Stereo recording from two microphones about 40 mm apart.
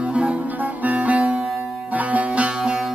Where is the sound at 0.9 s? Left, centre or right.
Right.